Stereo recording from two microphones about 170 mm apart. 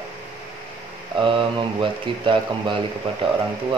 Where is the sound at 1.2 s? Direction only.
30° right (ahead or behind).